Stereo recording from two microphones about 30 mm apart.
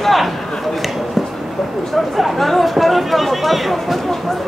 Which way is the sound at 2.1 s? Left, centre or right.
Centre.